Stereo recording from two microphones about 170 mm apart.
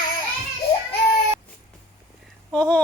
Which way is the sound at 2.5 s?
5° left (ahead or behind).